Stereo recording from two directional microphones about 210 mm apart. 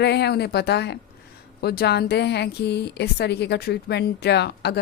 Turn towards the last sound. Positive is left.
turn(degrees=50)  # may be behind; listen again after turning